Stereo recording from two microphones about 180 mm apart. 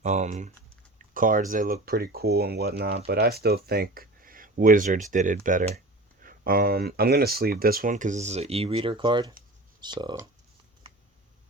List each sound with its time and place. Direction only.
0.0 s speech: 40° right (ahead or behind)
6.2 s speech: 55° right (ahead or behind); by 10.2 s 25° right (ahead or behind)